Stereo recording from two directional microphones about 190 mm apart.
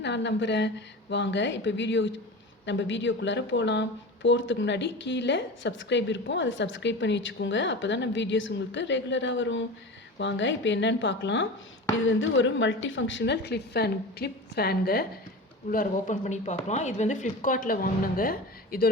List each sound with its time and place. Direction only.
0.0 s a woman's voice: 65° left (ahead or behind)
12.0 s a woman's voice: 80° left; by 16.1 s 50° left (ahead or behind)
16.2 s a woman's voice: 35° left (ahead or behind)